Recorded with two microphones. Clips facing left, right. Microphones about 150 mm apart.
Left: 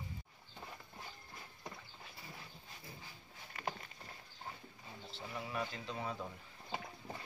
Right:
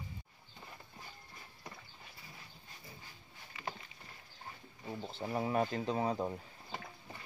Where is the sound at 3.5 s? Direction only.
40° left (ahead or behind).